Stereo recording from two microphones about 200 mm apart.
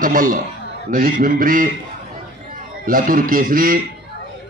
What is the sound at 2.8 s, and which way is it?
A man's voice, 45° right (ahead or behind).